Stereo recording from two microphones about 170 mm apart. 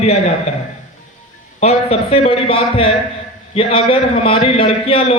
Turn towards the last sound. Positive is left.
turn(degrees=35)  # may be behind; listen again after turning